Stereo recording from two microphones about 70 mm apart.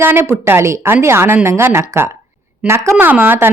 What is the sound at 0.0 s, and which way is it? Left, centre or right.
Speech, right.